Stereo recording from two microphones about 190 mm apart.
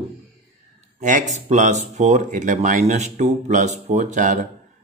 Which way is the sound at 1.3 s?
40° right (ahead or behind).